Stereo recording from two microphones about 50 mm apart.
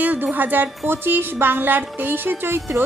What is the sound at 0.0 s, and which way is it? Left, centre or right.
Music, right.